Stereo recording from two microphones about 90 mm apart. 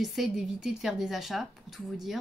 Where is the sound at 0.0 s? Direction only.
Centre (ahead or behind).